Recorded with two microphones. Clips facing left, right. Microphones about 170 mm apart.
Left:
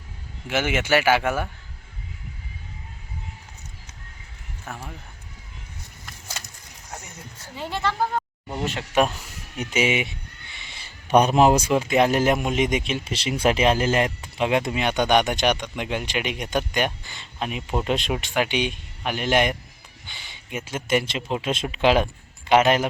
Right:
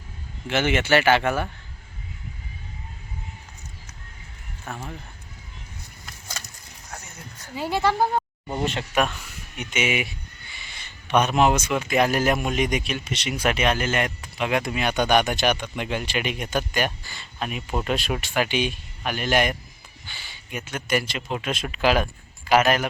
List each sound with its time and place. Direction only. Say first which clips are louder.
0.4 s speech: right 1 dB; 10° left (ahead or behind)
4.6 s speech: right 2 dB; 5° left (ahead or behind)
6.9 s a sound: left 1 dB; 30° left (ahead or behind)
7.5 s a woman's voice: right 4 dB; 10° right (ahead or behind)
9.0 s speech: left 4 dB; 25° left (ahead or behind)
15.5 s a woman's voice: even; 10° right (ahead or behind)
15.8 s speech: even; 15° left (ahead or behind)